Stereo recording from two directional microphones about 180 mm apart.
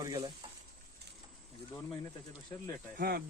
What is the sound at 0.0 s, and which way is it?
Speech, 25° right (ahead or behind).